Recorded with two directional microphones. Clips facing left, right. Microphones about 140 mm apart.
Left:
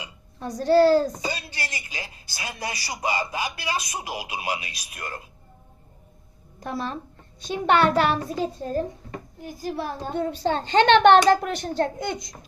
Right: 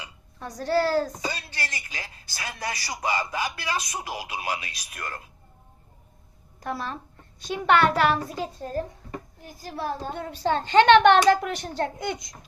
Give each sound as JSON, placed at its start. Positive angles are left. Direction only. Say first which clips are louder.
{"t": 0.0, "sound": "a woman's voice", "louder": "left 4 dB", "side_deg": 20}
{"t": 2.6, "sound": "a child's voice", "louder": "left 1 dB", "side_deg": 25}
{"t": 3.8, "sound": "speech", "louder": "left 1 dB", "side_deg": 10}
{"t": 6.6, "sound": "a child's voice", "louder": "left 2 dB", "side_deg": 25}
{"t": 9.4, "sound": "a child's voice", "louder": "left 4 dB", "side_deg": 20}